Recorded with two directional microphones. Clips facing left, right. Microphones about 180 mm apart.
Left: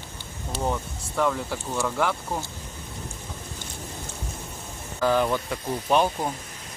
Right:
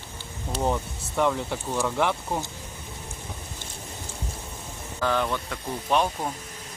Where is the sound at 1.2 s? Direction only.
10° right (ahead or behind).